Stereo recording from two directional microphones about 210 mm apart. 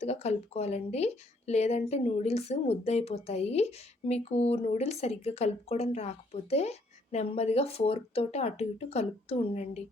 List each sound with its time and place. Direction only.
0.0 s a woman's voice: 30° left (ahead or behind)